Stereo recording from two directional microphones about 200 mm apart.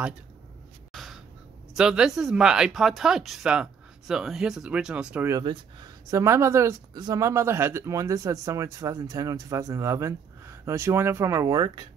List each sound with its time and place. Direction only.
0.9 s crow: centre (ahead or behind)
1.8 s speech: 5° right (ahead or behind)
5.4 s speech: 20° right (ahead or behind)